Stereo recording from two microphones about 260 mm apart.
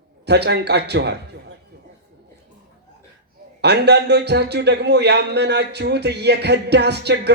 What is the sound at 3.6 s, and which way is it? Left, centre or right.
A man's voice, right.